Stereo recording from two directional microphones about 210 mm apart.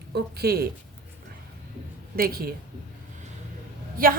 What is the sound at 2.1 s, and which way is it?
Speech, 45° right (ahead or behind).